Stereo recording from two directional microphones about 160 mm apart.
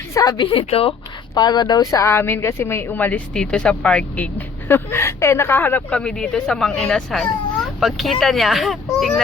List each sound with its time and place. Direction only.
0.1 s a woman's voice: 20° left (ahead or behind)
1.3 s speech: 25° left (ahead or behind); by 9.2 s centre (ahead or behind)